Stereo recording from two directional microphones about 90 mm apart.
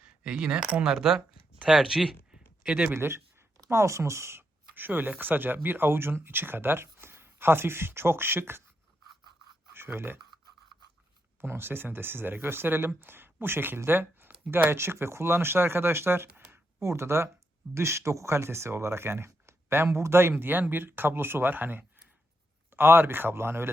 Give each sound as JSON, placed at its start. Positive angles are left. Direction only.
{"t": 0.0, "sound": "speech", "side_deg": -10}
{"t": 2.9, "sound": "speech", "side_deg": -30}
{"t": 9.7, "sound": "speech", "side_deg": -25}
{"t": 11.3, "sound": "speech", "side_deg": -25}